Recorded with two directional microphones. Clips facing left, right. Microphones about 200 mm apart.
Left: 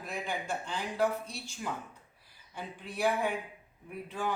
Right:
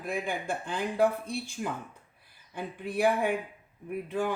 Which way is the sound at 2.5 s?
55° right (ahead or behind).